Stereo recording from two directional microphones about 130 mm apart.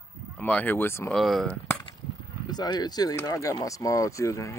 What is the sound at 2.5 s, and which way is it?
Speech, 30° left (ahead or behind).